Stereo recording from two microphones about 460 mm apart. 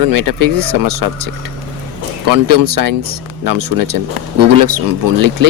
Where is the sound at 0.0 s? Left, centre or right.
Right.